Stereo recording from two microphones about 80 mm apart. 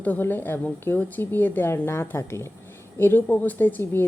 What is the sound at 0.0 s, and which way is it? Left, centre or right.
A woman's voice, left.